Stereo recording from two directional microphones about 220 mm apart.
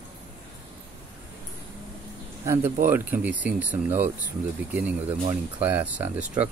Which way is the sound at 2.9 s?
10° right (ahead or behind).